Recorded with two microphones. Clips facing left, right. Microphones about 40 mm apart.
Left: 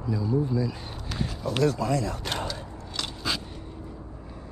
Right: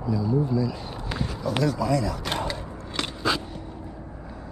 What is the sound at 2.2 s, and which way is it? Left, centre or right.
Scissors, right.